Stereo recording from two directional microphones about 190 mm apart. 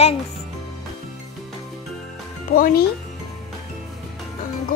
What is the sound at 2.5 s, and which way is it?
Speech, 50° left (ahead or behind).